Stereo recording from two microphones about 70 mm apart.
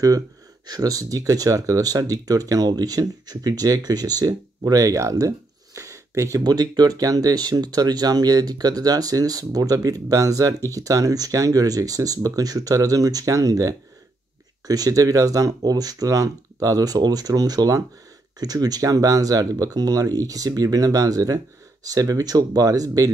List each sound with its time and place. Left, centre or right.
0.7 s speech: right
6.4 s speech: right